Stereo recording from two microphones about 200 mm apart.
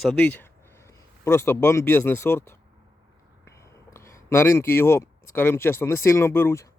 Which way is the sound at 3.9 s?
15° left (ahead or behind).